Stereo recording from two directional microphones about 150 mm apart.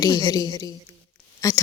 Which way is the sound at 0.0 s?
25° left (ahead or behind).